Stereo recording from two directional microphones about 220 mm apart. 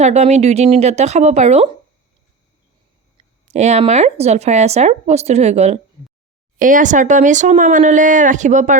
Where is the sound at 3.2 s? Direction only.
30° right (ahead or behind).